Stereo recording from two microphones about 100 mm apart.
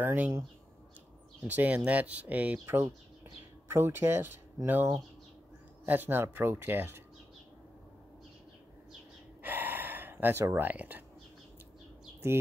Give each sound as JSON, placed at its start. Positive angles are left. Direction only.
{"t": 0.0, "sound": "speech", "side_deg": -20}
{"t": 1.5, "sound": "speech", "side_deg": -15}
{"t": 9.4, "sound": "gasp", "side_deg": -20}